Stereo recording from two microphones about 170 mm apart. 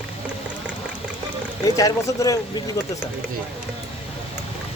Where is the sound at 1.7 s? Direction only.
20° left (ahead or behind).